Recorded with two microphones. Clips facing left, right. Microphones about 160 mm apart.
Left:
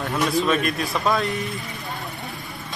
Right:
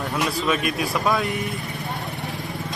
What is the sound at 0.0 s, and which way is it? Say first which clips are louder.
A man's voice: left 2 dB; centre (ahead or behind).